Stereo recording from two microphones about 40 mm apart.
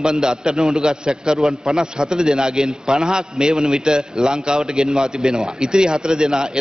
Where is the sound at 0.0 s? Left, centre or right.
Centre.